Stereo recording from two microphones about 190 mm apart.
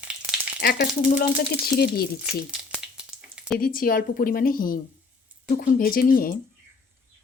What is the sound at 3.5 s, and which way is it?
Speech, 50° left (ahead or behind).